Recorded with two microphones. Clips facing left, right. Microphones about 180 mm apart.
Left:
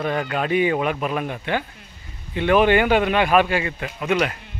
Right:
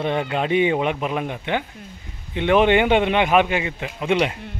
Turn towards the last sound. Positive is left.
turn(degrees=-20)  # may be behind; listen again after turning